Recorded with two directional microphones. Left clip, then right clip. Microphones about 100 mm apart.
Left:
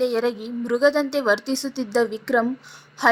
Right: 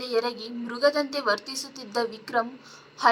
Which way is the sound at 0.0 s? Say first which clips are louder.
Left 5 dB; 15° left (ahead or behind).